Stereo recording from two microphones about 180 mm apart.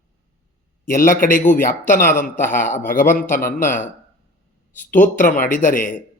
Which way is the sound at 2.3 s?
10° left (ahead or behind).